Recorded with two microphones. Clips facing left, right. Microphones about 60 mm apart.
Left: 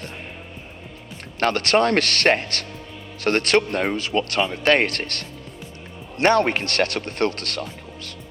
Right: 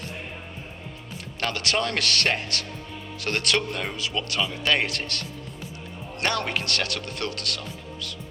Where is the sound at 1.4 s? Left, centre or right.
Left.